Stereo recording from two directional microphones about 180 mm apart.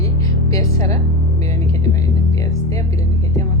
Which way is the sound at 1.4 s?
20° left (ahead or behind).